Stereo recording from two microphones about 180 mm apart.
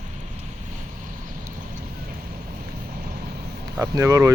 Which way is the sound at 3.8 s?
15° right (ahead or behind).